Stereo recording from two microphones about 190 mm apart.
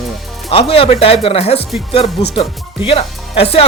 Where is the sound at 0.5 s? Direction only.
30° left (ahead or behind).